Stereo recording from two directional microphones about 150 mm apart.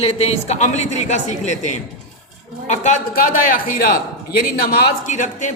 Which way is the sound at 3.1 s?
70° left (ahead or behind).